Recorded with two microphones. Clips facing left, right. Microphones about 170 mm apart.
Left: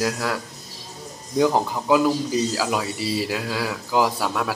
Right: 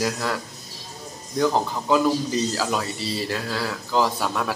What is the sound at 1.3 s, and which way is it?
Speech, 10° left (ahead or behind).